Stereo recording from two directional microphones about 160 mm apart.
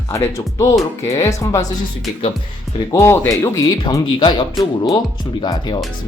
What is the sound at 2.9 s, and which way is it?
Speech, 15° left (ahead or behind).